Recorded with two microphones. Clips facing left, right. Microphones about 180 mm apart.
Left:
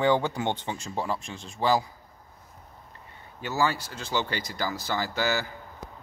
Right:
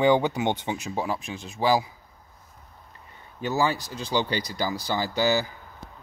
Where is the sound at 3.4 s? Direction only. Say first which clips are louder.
Right 2 dB; 15° right (ahead or behind).